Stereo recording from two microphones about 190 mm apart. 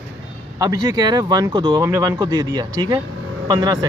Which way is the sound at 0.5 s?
20° right (ahead or behind).